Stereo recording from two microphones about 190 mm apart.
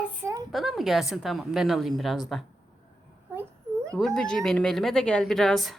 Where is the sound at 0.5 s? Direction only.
Centre (ahead or behind).